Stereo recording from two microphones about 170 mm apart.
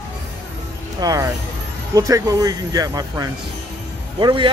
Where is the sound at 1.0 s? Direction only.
20° right (ahead or behind).